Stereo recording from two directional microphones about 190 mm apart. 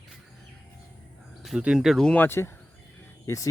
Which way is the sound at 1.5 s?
5° right (ahead or behind).